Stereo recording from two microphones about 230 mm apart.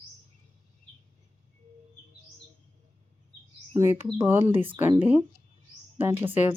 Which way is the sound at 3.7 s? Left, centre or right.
Centre.